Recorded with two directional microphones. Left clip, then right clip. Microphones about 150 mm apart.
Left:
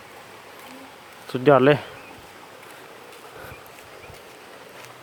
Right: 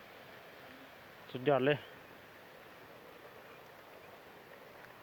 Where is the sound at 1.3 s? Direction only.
25° left (ahead or behind).